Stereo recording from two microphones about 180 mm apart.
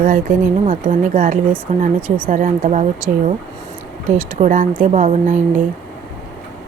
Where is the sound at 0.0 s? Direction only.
55° right (ahead or behind).